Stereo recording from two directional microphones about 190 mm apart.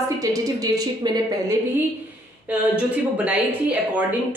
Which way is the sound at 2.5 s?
5° right (ahead or behind).